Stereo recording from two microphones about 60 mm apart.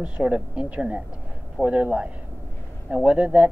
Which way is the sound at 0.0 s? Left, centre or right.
Centre.